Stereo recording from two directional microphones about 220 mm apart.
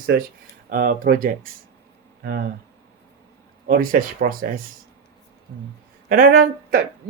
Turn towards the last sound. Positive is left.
turn(degrees=-40)  # may be behind; listen again after turning